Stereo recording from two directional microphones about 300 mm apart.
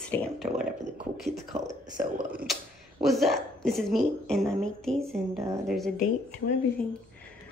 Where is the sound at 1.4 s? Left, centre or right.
Right.